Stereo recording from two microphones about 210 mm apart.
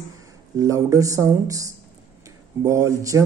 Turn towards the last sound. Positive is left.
turn(degrees=-15)  # may be behind; listen again after turning